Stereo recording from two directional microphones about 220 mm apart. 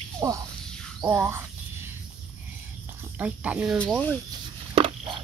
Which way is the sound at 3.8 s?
5° left (ahead or behind).